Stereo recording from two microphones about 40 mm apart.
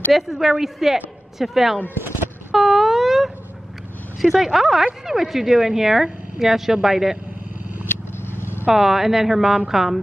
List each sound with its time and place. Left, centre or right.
0.1 s speech: centre
2.5 s a sound: centre
4.2 s speech: centre
7.8 s vehicle: left
8.7 s speech: centre